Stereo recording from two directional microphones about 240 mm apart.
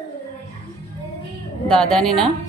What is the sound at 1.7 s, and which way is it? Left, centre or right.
Speech, centre.